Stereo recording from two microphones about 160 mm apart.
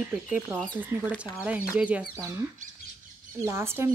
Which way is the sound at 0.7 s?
10° right (ahead or behind).